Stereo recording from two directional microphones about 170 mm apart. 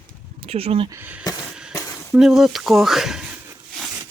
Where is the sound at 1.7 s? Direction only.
20° left (ahead or behind).